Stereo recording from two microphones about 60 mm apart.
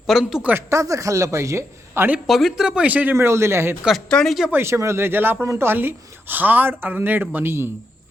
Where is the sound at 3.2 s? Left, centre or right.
Right.